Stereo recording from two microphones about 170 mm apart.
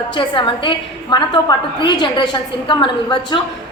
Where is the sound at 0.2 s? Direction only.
30° left (ahead or behind).